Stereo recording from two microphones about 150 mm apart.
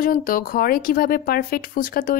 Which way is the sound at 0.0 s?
70° left (ahead or behind).